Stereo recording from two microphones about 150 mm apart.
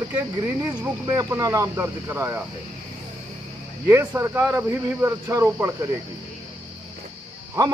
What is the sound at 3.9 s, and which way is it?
A man's voice, 20° right (ahead or behind).